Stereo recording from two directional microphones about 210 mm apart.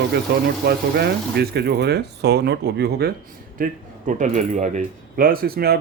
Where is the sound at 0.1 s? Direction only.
50° right (ahead or behind).